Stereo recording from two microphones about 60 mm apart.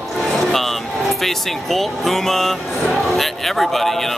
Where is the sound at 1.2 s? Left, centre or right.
Centre.